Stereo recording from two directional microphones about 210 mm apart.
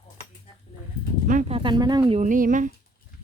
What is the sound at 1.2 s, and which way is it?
Speech, 40° right (ahead or behind).